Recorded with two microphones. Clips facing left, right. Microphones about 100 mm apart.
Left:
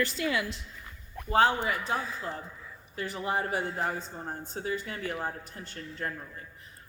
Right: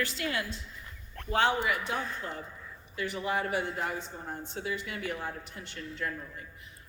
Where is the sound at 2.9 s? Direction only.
40° left (ahead or behind).